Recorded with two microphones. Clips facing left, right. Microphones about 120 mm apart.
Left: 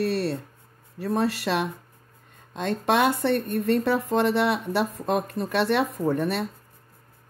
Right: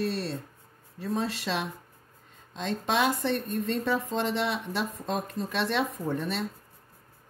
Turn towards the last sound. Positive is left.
turn(degrees=60)  # may be behind; listen again after turning